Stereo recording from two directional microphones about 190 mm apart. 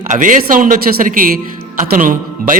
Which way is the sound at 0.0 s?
45° right (ahead or behind).